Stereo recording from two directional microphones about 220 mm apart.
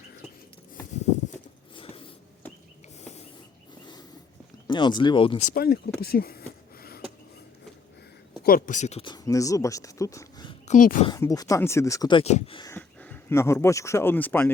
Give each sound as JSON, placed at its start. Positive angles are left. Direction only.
{"t": 1.7, "sound": "a sound", "side_deg": 25}
{"t": 4.7, "sound": "speech", "side_deg": 20}
{"t": 5.5, "sound": "speech", "side_deg": 45}
{"t": 8.4, "sound": "speech", "side_deg": 40}
{"t": 10.7, "sound": "speech", "side_deg": 35}
{"t": 11.0, "sound": "speech", "side_deg": 15}
{"t": 12.7, "sound": "speech", "side_deg": 10}